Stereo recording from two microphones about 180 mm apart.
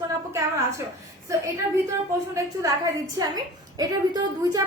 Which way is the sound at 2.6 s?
20° right (ahead or behind).